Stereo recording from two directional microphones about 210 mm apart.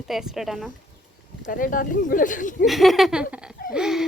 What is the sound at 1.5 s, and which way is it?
Speech, 40° left (ahead or behind).